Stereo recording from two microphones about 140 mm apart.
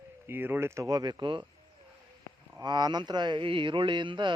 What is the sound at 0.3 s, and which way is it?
Speech, 15° right (ahead or behind).